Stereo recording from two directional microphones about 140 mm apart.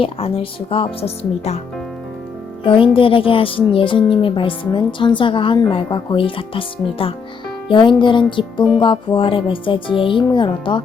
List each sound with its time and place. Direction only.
0.0 s speech: 45° left (ahead or behind)
2.6 s a woman's voice: 40° left (ahead or behind)